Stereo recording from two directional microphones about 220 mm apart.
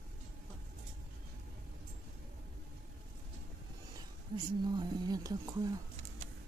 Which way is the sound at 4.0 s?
20° right (ahead or behind).